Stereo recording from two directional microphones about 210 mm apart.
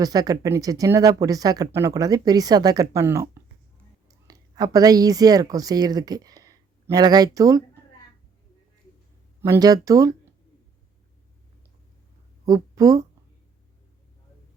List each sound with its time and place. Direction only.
0.0 s speech: 15° right (ahead or behind)
9.4 s speech: 15° right (ahead or behind)
12.5 s speech: 15° right (ahead or behind)